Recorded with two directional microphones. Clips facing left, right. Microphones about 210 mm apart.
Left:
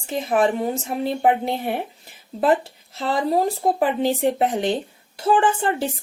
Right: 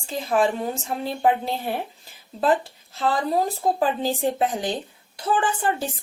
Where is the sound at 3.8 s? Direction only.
20° left (ahead or behind).